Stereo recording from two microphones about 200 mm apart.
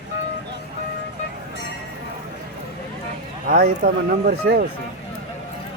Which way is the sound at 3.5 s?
45° right (ahead or behind).